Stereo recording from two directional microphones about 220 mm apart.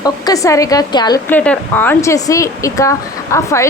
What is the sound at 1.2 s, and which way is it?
Speech, 5° left (ahead or behind).